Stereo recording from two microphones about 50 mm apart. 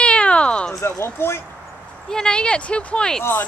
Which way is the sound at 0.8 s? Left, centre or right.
Left.